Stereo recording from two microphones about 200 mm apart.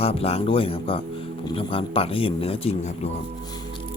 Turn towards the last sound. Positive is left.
turn(degrees=30)  # may be behind; listen again after turning